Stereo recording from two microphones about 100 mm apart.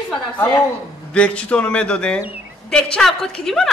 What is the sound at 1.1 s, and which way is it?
A woman's voice, 10° left (ahead or behind).